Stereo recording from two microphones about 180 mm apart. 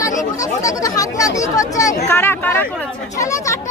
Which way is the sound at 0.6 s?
20° left (ahead or behind).